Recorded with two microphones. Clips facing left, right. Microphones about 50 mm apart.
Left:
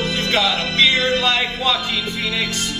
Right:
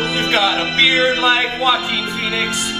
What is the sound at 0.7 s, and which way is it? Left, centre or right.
Music, right.